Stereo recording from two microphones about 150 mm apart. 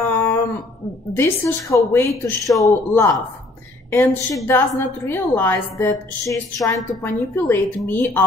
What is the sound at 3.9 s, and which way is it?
A woman's voice, 15° left (ahead or behind).